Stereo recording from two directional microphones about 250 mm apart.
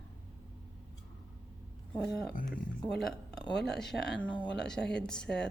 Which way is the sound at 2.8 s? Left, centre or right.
Centre.